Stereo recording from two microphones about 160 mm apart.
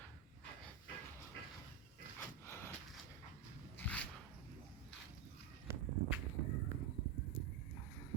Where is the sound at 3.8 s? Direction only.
10° left (ahead or behind).